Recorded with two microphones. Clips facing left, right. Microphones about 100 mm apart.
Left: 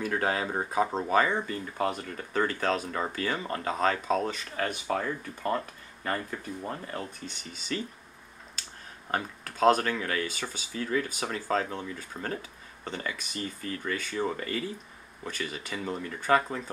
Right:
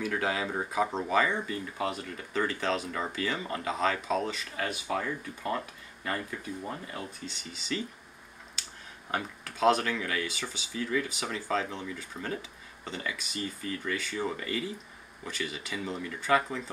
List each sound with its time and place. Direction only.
0.0 s speech: 45° left (ahead or behind)
9.1 s speech: 45° left (ahead or behind)